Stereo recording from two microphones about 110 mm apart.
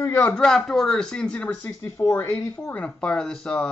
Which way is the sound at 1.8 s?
25° left (ahead or behind).